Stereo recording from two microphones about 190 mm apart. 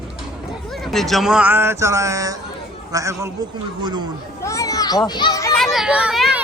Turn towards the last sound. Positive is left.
turn(degrees=-5)  # may be behind; listen again after turning